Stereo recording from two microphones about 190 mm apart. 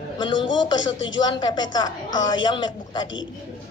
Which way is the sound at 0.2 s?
25° left (ahead or behind).